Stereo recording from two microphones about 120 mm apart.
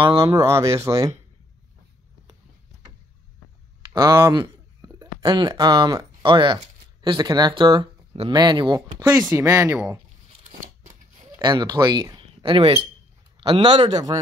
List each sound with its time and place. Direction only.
0.4 s speech: 25° right (ahead or behind)
3.9 s speech: 30° right (ahead or behind)
11.4 s speech: 35° right (ahead or behind)